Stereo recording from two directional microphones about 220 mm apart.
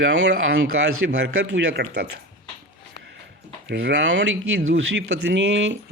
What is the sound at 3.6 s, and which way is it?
Speech, 55° right (ahead or behind).